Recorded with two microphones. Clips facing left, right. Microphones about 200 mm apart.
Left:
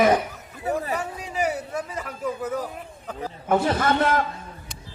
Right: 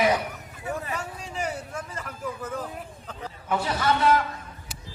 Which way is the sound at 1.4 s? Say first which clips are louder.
Left 6 dB; 10° left (ahead or behind).